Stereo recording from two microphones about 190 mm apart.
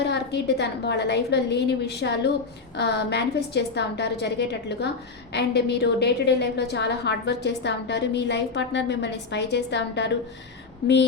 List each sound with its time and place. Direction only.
0.0 s a woman's voice: 60° left (ahead or behind)